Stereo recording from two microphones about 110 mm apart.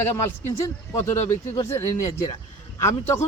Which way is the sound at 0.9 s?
25° left (ahead or behind).